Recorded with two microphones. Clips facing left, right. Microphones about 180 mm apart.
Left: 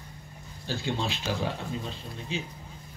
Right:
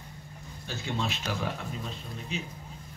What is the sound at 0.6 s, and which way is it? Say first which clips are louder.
Speech: left 2 dB; 30° left (ahead or behind).